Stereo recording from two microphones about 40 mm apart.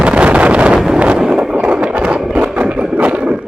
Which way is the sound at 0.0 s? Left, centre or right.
Right.